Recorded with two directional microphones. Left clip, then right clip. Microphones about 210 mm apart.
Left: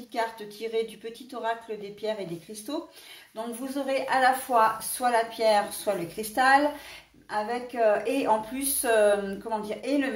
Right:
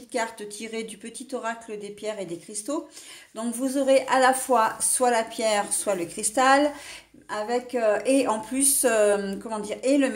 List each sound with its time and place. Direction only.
0.1 s a woman's voice: 45° right (ahead or behind)
2.0 s a woman's voice: 45° right (ahead or behind)